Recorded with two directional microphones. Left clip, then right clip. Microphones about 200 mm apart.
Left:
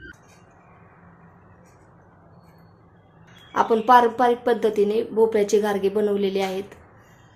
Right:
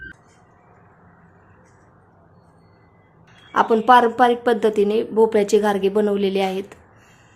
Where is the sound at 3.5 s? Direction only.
20° right (ahead or behind).